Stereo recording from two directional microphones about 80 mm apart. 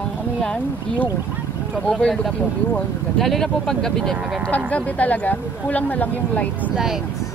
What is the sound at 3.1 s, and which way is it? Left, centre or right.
Speech, centre.